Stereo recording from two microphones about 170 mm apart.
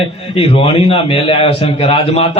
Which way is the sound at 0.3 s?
35° left (ahead or behind).